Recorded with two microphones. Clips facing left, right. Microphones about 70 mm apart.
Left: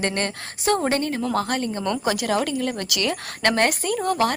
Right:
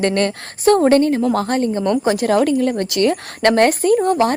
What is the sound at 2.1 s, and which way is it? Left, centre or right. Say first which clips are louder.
A woman's voice: right 8 dB; right.